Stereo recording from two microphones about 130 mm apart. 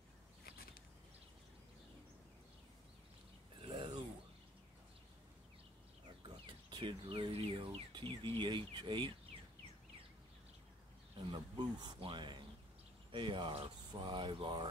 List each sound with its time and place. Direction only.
3.6 s a sound: 40° right (ahead or behind)
6.2 s speech: 35° right (ahead or behind)
7.9 s speech: 35° right (ahead or behind)
11.1 s speech: 35° right (ahead or behind)